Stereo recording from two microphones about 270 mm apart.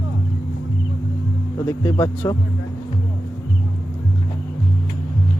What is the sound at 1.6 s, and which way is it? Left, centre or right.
Speech, centre.